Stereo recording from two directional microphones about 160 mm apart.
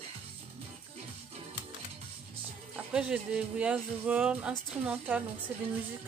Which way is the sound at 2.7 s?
5° right (ahead or behind).